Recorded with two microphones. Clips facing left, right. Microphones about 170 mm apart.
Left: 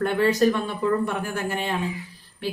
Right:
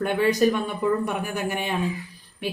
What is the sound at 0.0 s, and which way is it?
Speech, 15° right (ahead or behind).